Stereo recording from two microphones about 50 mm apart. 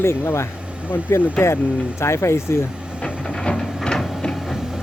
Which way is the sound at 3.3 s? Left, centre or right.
Centre.